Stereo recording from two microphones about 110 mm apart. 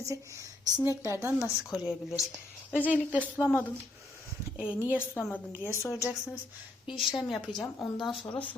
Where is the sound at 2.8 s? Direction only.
15° right (ahead or behind).